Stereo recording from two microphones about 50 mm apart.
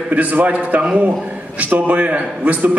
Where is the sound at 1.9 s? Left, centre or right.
Right.